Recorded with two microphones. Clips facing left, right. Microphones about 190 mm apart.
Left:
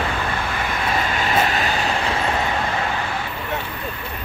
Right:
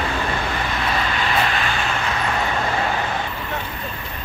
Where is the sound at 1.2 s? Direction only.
40° left (ahead or behind).